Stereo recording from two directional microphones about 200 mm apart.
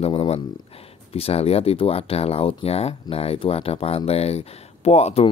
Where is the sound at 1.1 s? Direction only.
30° left (ahead or behind).